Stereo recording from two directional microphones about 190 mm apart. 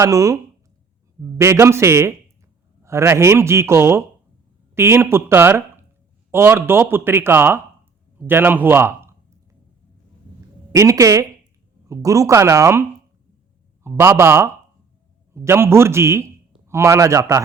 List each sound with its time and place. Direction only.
0.0 s speech: 15° right (ahead or behind)
8.3 s a sound: 10° right (ahead or behind)
10.7 s speech: 15° right (ahead or behind)